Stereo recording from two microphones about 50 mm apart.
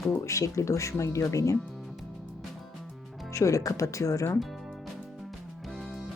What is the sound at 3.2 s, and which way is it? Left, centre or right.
Speech, left.